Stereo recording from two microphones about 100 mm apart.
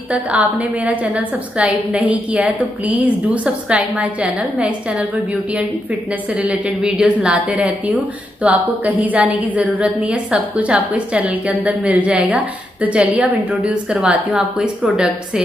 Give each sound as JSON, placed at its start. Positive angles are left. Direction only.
{"t": 0.1, "sound": "a woman's voice", "side_deg": -15}